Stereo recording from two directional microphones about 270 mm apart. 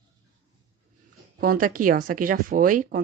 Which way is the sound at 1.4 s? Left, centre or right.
Right.